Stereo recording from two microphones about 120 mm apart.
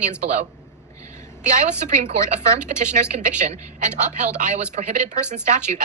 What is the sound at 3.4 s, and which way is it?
A woman's voice, 80° right.